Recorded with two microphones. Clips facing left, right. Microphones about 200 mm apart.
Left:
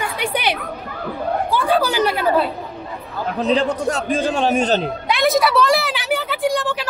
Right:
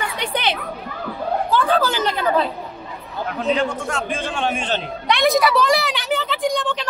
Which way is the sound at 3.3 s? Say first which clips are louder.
Left 3 dB; 35° left (ahead or behind).